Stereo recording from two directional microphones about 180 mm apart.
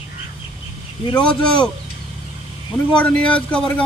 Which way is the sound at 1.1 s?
25° left (ahead or behind).